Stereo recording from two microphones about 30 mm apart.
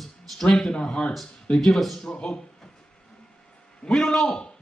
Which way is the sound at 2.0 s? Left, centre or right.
Left.